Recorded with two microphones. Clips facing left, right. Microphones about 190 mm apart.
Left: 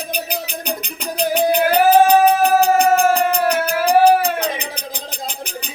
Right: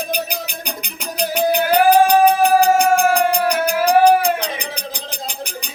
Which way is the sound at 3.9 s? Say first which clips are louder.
Even; 5° left (ahead or behind).